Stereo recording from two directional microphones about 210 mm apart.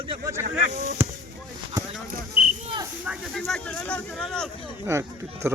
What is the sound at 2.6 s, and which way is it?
Cricket, 25° right (ahead or behind).